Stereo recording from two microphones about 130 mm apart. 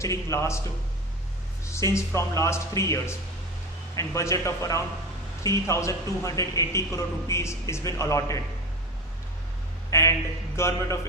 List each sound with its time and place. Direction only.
0.0 s a man's voice: 25° left (ahead or behind)
1.6 s a man's voice: 20° left (ahead or behind)
9.9 s a man's voice: 20° left (ahead or behind)